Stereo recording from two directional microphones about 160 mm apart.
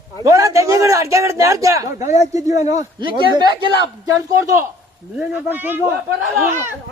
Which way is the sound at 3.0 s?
30° right (ahead or behind).